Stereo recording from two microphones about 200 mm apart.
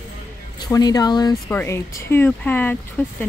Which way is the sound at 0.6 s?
20° left (ahead or behind).